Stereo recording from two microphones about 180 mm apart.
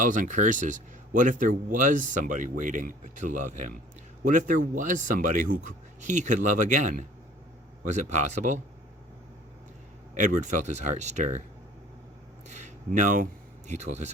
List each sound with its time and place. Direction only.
0.0 s speech: 45° right (ahead or behind)
10.2 s speech: 40° right (ahead or behind)
12.5 s a sound: 40° right (ahead or behind)
13.7 s speech: 40° right (ahead or behind)